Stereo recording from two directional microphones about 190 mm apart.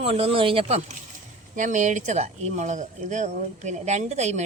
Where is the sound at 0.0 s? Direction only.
30° right (ahead or behind).